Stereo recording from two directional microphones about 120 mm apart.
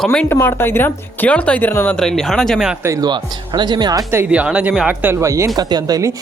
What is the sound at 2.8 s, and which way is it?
Speech, 25° right (ahead or behind).